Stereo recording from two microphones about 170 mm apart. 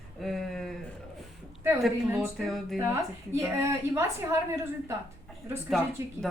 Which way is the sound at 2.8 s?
15° right (ahead or behind).